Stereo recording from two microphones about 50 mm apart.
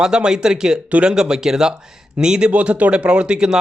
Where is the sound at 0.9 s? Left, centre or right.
Right.